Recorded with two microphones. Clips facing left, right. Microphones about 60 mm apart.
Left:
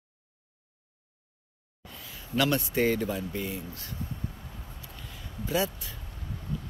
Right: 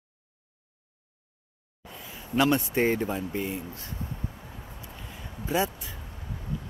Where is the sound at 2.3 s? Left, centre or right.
Right.